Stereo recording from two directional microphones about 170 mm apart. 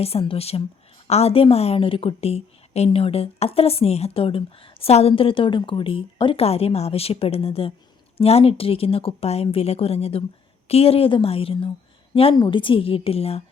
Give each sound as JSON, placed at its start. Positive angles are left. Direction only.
{"t": 0.0, "sound": "a woman's voice", "side_deg": 35}